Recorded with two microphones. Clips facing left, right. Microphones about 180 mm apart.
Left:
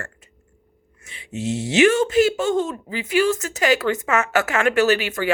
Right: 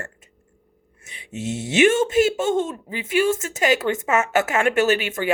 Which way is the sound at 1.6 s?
25° right (ahead or behind).